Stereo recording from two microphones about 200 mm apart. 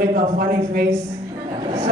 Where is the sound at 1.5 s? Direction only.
30° right (ahead or behind).